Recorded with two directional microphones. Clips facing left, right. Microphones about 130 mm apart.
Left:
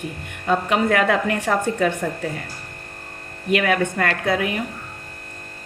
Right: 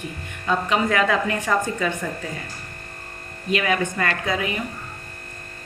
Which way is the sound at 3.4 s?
60° left (ahead or behind).